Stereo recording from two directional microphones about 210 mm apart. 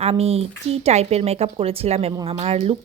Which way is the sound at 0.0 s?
30° right (ahead or behind).